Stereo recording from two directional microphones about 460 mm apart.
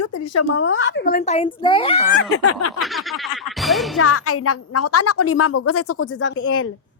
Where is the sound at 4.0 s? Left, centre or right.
Left.